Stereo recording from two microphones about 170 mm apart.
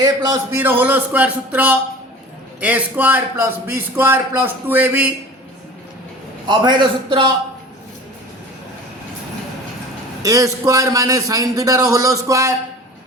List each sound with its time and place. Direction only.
0.6 s speech: 10° right (ahead or behind)
6.5 s a man's voice: 25° right (ahead or behind)
10.2 s a man's voice: 20° right (ahead or behind)